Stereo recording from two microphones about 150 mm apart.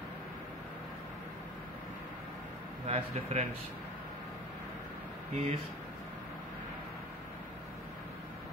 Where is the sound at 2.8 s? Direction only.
45° right (ahead or behind).